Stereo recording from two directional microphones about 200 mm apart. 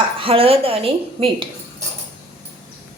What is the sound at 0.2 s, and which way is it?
A woman's voice, 25° right (ahead or behind).